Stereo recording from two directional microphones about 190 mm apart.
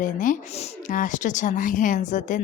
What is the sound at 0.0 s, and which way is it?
A woman's voice, 45° left (ahead or behind).